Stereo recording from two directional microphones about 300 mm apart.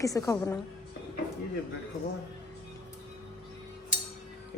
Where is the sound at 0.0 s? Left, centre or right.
Centre.